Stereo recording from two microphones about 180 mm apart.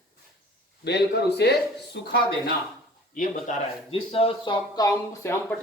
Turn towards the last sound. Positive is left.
turn(degrees=15)  # may be behind; listen again after turning